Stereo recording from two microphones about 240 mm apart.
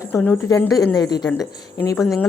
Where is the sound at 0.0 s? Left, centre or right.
Centre.